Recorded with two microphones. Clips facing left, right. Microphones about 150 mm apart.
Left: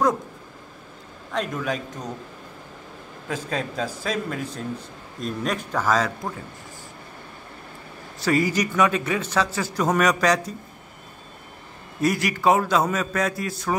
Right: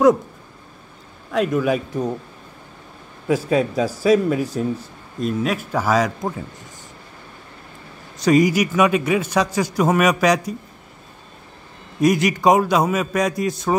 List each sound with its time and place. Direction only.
1.3 s a man's voice: 5° right (ahead or behind)
3.3 s a man's voice: 10° right (ahead or behind)
8.2 s a man's voice: 15° right (ahead or behind)
12.0 s a man's voice: 20° right (ahead or behind)